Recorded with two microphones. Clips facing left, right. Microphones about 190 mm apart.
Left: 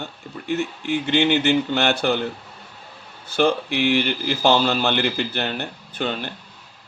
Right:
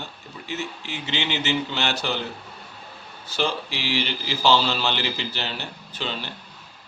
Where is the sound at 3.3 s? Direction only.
55° left (ahead or behind).